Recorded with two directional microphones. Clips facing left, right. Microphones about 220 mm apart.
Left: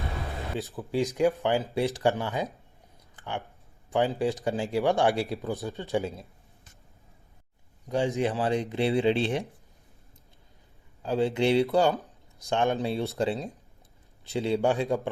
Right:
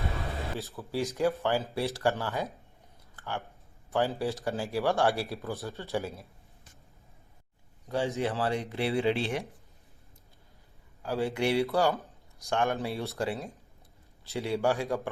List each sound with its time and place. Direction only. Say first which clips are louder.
0.8 s speech: left 4 dB; 15° left (ahead or behind)
3.2 s a sound: left 2 dB; 15° left (ahead or behind)
3.8 s speech: left 3 dB; 15° left (ahead or behind)
7.9 s speech: left 3 dB; 15° left (ahead or behind)
11.0 s speech: left 4 dB; 25° left (ahead or behind)